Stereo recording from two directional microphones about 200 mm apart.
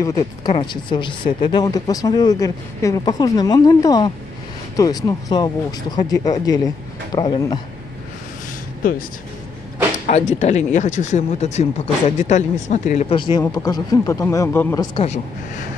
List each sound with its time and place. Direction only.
0.5 s speech: 25° left (ahead or behind)
10.0 s speech: 35° left (ahead or behind)
13.1 s speech: 25° left (ahead or behind)